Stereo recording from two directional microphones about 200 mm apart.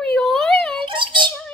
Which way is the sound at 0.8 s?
25° right (ahead or behind).